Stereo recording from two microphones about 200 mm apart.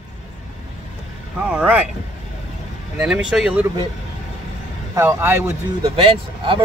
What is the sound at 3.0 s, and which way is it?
Speech, 5° right (ahead or behind).